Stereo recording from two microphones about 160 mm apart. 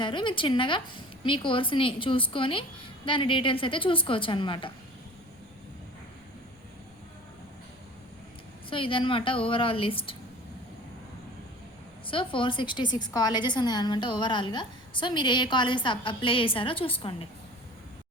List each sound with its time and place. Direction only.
0.0 s a woman's voice: 30° left (ahead or behind)
8.7 s a woman's voice: 35° left (ahead or behind)
12.0 s a woman's voice: 30° left (ahead or behind)